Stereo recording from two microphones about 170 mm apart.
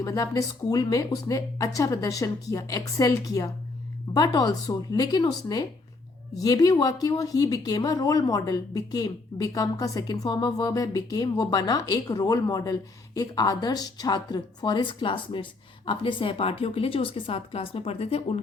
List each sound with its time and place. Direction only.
0.0 s a woman's voice: 20° left (ahead or behind); by 18.3 s 35° left (ahead or behind)